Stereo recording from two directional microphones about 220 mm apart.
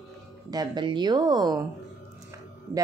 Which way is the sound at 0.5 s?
20° right (ahead or behind).